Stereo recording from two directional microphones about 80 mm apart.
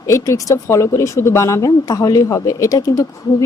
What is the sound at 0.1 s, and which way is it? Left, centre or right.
Speech, left.